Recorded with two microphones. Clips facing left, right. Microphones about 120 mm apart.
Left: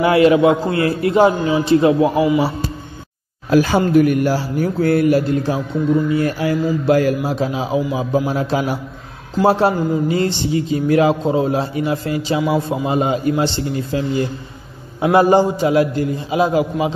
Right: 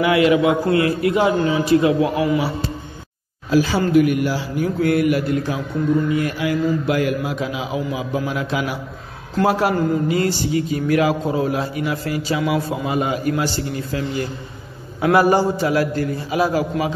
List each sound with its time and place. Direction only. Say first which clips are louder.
0.0 s a man's voice: left 3 dB; 35° left (ahead or behind)
2.1 s a man's voice: left 4 dB; 5° left (ahead or behind)
3.4 s a man's voice: left 3 dB; 55° left (ahead or behind); by 16.6 s 20° left (ahead or behind)